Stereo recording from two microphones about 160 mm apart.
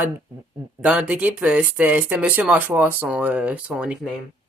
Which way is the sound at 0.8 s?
5° right (ahead or behind).